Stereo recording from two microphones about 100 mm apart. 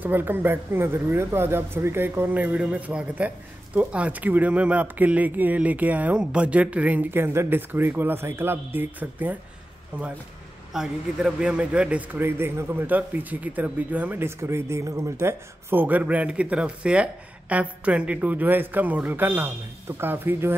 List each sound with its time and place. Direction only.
0.0 s speech: 20° right (ahead or behind)